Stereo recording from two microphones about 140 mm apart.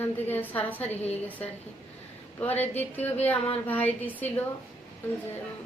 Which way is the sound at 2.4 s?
15° left (ahead or behind).